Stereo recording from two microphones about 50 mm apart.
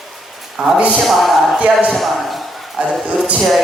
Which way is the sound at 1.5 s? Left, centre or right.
Right.